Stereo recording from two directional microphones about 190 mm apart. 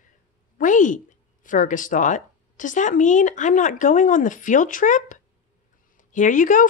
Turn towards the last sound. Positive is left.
turn(degrees=45)  # may be behind; listen again after turning